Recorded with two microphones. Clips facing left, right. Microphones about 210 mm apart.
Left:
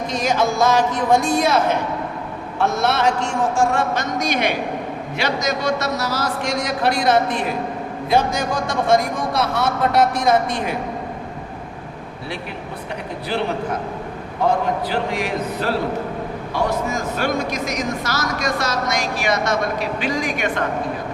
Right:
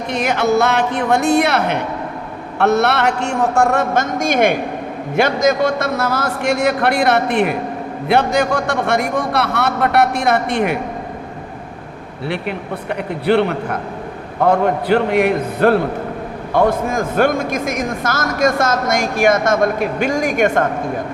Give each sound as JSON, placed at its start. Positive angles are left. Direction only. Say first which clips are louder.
{"t": 0.1, "sound": "a man's voice", "louder": "right 5 dB", "side_deg": -65}
{"t": 12.3, "sound": "a man's voice", "louder": "right 8 dB", "side_deg": -65}